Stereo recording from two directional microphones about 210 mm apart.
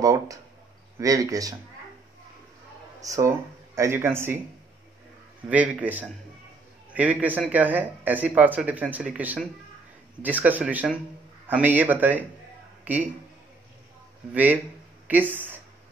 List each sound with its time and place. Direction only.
0.0 s speech: 15° right (ahead or behind)
3.0 s speech: 15° right (ahead or behind)
5.5 s speech: 5° right (ahead or behind)
14.3 s speech: 10° right (ahead or behind)